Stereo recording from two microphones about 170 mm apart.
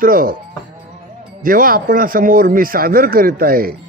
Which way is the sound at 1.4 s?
55° right (ahead or behind).